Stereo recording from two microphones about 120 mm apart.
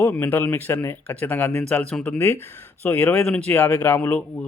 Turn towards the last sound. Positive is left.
turn(degrees=10)  # may be behind; listen again after turning